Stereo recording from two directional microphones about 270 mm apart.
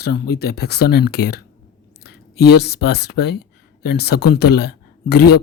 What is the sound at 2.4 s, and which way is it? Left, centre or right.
Speech, left.